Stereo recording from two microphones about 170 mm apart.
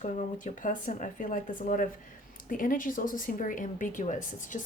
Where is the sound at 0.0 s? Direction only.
50° left (ahead or behind).